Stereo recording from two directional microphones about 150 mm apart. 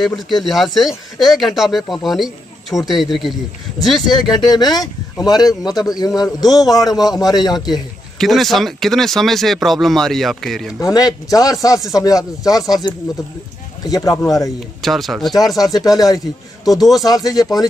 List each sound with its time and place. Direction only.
0.0 s speech: centre (ahead or behind)
4.4 s a man's voice: 25° left (ahead or behind)
8.2 s speech: centre (ahead or behind)
10.8 s a man's voice: 25° left (ahead or behind)
14.8 s speech: centre (ahead or behind)
15.3 s a man's voice: 25° left (ahead or behind)
16.7 s speech: centre (ahead or behind)
17.0 s a man's voice: 25° left (ahead or behind)